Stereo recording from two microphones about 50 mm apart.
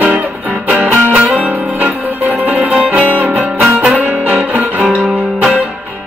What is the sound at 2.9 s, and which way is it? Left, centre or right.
Music, right.